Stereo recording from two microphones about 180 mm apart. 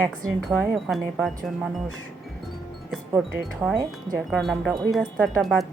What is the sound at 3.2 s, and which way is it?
Speech, centre (ahead or behind).